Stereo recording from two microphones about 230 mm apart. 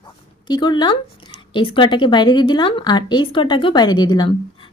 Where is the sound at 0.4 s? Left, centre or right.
Centre.